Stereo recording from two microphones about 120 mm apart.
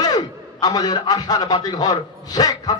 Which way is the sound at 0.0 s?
35° left (ahead or behind).